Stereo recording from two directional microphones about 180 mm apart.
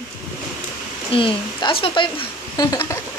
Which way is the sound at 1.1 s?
30° left (ahead or behind).